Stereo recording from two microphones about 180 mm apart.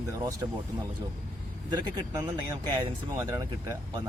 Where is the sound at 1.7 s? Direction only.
20° right (ahead or behind).